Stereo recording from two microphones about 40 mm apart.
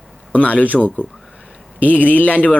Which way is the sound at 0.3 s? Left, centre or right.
Left.